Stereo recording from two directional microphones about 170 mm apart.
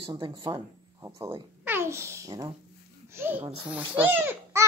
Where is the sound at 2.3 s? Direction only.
30° right (ahead or behind).